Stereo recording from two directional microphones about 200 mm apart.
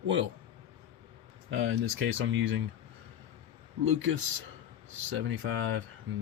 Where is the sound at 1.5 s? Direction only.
75° right (ahead or behind).